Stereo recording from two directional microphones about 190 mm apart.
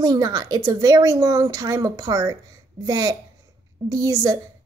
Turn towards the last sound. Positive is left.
turn(degrees=-20)  # may be behind; listen again after turning